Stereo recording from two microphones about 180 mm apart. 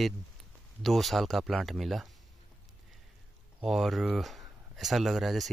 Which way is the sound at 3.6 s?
Centre (ahead or behind).